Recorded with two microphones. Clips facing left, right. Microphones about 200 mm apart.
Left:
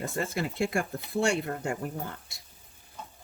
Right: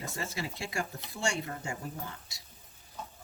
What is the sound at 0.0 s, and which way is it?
Speech, 55° left (ahead or behind).